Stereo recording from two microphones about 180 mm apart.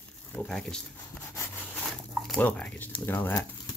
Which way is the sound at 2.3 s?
10° left (ahead or behind).